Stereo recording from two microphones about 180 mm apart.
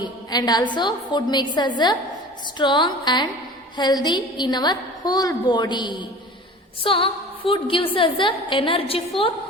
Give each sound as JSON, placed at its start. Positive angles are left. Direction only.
{"t": 0.0, "sound": "a woman's voice", "side_deg": 20}